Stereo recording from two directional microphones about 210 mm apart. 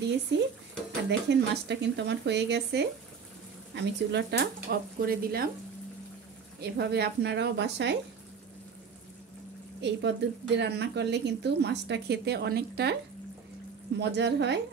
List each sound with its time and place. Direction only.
0.3 s speech: 55° right (ahead or behind)
6.6 s speech: 50° right (ahead or behind)
9.8 s speech: 55° right (ahead or behind)
13.9 s speech: 55° right (ahead or behind)